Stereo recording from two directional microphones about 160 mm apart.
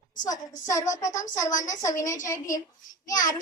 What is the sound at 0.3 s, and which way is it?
Speech, 20° left (ahead or behind).